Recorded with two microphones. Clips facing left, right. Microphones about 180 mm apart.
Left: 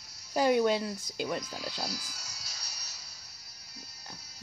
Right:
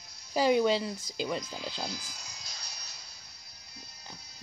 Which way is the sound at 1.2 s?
5° left (ahead or behind).